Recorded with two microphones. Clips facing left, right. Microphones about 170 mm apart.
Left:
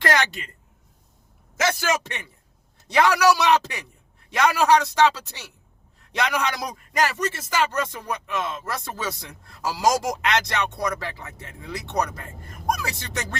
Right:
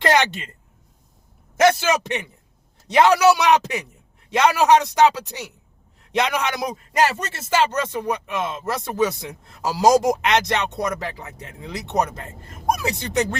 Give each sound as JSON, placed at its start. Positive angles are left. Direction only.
{"t": 1.8, "sound": "a man's voice", "side_deg": -20}